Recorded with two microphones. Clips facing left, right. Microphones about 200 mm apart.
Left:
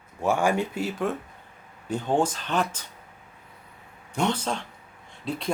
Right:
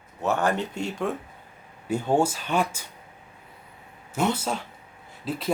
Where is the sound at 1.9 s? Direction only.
10° right (ahead or behind).